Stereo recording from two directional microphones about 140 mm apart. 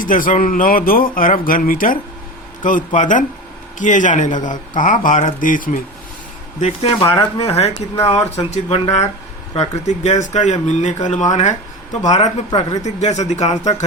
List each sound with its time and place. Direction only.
0.0 s a man's voice: 75° left (ahead or behind)
2.6 s speech: 65° left (ahead or behind)
6.6 s speech: 50° left (ahead or behind)